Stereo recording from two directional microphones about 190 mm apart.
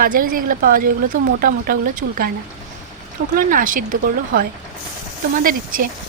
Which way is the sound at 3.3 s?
45° right (ahead or behind).